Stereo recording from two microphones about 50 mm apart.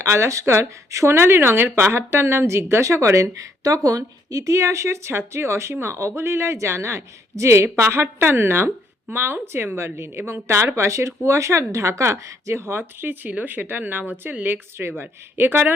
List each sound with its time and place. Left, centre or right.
0.0 s speech: right
9.4 s speech: right
12.6 s speech: right